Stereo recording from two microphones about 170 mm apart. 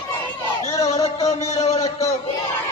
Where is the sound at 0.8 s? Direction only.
40° left (ahead or behind).